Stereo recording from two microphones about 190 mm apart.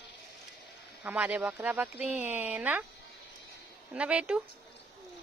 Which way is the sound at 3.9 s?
5° right (ahead or behind).